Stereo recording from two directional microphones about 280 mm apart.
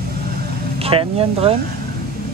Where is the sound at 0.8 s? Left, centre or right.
Right.